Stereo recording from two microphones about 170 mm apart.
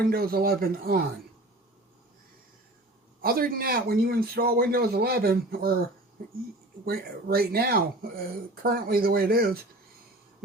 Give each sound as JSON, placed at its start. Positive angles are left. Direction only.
{"t": 0.0, "sound": "a man's voice", "side_deg": -60}
{"t": 3.2, "sound": "a man's voice", "side_deg": -60}